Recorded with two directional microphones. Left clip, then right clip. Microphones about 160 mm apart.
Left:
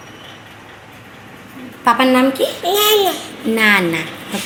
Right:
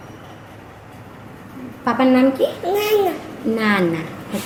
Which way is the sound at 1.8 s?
5° left (ahead or behind).